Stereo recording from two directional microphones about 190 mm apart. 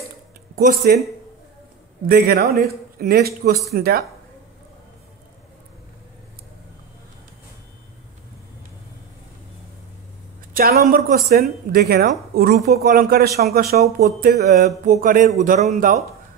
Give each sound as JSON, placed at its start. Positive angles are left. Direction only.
{"t": 0.6, "sound": "speech", "side_deg": -50}
{"t": 2.0, "sound": "a man's voice", "side_deg": -55}
{"t": 10.5, "sound": "a man's voice", "side_deg": -45}